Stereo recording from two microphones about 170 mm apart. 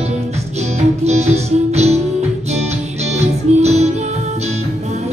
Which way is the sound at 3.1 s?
40° right (ahead or behind).